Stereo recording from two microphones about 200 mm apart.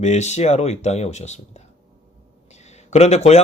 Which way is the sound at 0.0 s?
35° left (ahead or behind).